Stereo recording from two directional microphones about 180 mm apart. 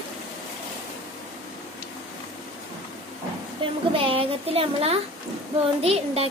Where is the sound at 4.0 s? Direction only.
30° right (ahead or behind).